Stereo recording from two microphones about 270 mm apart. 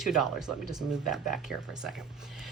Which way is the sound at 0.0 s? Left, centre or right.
Centre.